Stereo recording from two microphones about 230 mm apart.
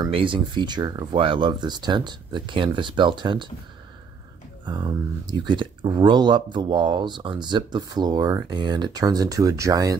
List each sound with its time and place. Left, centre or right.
0.0 s speech: right
4.6 s speech: centre